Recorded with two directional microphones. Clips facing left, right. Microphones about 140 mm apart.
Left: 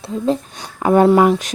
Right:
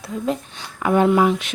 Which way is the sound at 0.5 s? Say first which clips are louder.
Left 4 dB; 40° left (ahead or behind).